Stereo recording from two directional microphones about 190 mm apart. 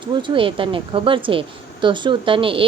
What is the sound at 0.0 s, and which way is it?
Speech, 25° right (ahead or behind).